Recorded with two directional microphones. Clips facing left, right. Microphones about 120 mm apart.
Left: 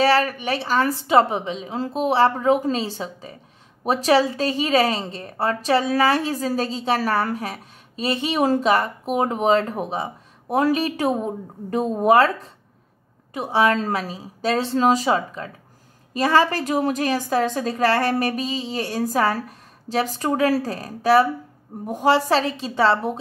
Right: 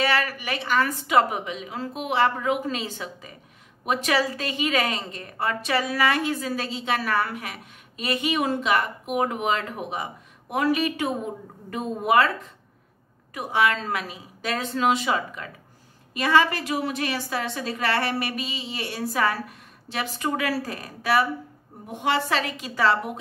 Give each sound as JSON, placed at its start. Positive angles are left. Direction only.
{"t": 0.0, "sound": "a woman's voice", "side_deg": 35}